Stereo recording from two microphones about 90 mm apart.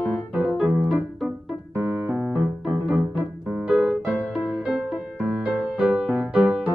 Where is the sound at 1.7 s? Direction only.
25° right (ahead or behind).